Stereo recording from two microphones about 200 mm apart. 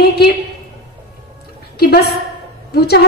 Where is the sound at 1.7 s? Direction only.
50° left (ahead or behind).